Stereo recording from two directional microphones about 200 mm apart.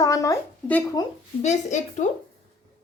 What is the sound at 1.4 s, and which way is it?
Speech, 35° left (ahead or behind).